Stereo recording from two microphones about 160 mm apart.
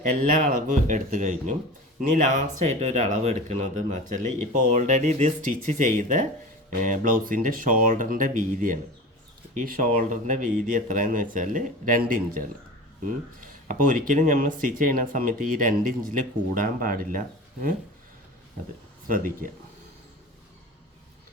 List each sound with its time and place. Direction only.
0.1 s speech: 50° right (ahead or behind)
19.0 s speech: 60° right (ahead or behind)